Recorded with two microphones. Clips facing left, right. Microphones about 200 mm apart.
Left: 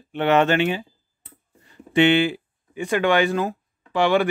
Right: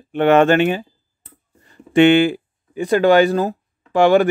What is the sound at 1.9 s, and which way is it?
Speech, 50° right (ahead or behind).